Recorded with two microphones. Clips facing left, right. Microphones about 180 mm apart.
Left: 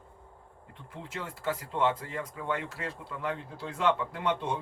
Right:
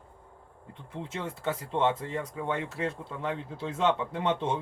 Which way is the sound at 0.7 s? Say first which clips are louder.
Right 4 dB; 25° right (ahead or behind).